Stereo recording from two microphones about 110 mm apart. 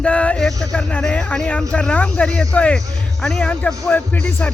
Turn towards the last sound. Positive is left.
turn(degrees=15)  # may be behind; listen again after turning